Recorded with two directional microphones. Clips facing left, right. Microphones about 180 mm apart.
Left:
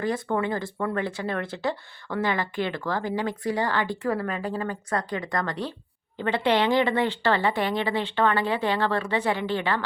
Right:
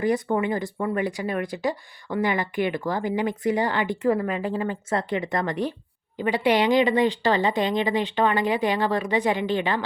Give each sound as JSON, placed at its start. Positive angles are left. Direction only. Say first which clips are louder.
{"t": 0.0, "sound": "speech", "louder": "right 3 dB", "side_deg": -20}